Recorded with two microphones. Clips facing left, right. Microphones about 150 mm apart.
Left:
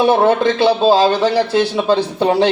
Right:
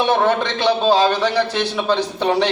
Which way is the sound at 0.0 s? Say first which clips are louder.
Left 5 dB; 30° left (ahead or behind).